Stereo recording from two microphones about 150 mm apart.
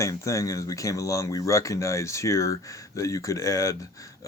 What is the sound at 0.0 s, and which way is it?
Speech, 20° left (ahead or behind).